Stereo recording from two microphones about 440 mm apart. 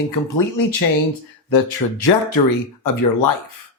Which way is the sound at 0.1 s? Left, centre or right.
Left.